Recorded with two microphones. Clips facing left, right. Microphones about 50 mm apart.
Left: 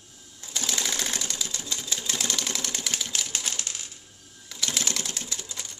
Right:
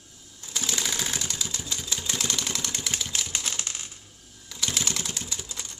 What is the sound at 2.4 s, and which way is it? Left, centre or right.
Vehicle, centre.